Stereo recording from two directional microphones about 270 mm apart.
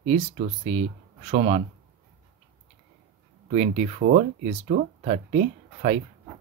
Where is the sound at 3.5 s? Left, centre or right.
Right.